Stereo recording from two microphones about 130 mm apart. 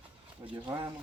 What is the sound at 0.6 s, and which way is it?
Speech, 35° right (ahead or behind).